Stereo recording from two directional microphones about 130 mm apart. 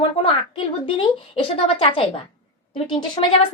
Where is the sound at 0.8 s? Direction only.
45° left (ahead or behind).